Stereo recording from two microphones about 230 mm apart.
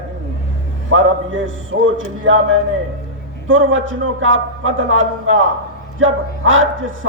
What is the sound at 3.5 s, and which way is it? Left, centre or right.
A man's voice, right.